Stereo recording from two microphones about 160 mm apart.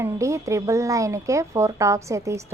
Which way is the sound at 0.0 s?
20° right (ahead or behind).